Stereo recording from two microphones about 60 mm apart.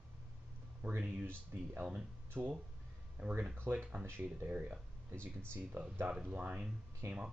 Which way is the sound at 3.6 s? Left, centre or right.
Right.